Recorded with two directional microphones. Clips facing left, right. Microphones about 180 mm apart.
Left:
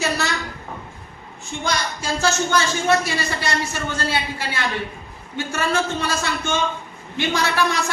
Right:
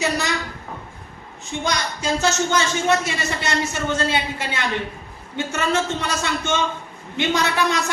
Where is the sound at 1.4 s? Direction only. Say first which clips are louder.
Even; 20° right (ahead or behind).